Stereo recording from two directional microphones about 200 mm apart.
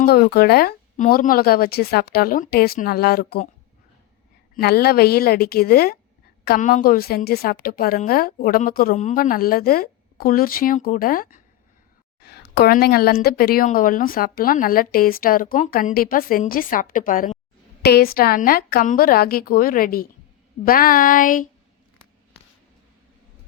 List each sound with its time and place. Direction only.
0.0 s a woman's voice: 50° left (ahead or behind)
4.5 s a woman's voice: 50° left (ahead or behind)
12.2 s a sound: 50° left (ahead or behind)
13.2 s a woman's voice: 50° left (ahead or behind)